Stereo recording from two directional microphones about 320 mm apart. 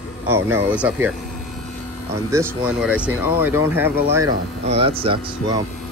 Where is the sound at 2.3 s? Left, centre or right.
Centre.